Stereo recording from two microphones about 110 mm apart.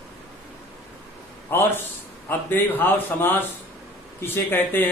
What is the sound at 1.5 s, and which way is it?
A man's voice, 20° left (ahead or behind).